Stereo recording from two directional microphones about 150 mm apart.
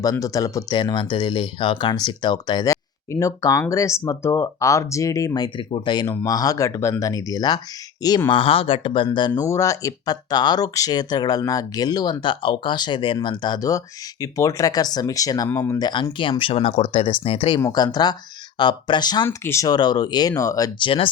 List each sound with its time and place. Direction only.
0.0 s speech: 25° left (ahead or behind)
8.3 s speech: 35° left (ahead or behind); by 15.9 s 20° left (ahead or behind)
15.9 s speech: 30° left (ahead or behind)
17.6 s speech: 25° left (ahead or behind)
20.7 s speech: 35° left (ahead or behind)